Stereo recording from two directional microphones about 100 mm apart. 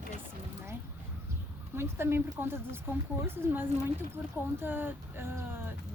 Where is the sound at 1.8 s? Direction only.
25° right (ahead or behind).